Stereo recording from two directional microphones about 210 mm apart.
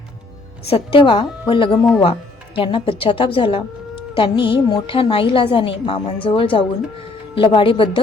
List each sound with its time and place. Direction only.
0.7 s a woman's voice: 25° left (ahead or behind)